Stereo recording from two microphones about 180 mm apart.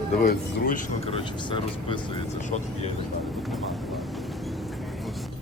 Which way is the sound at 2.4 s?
45° left (ahead or behind).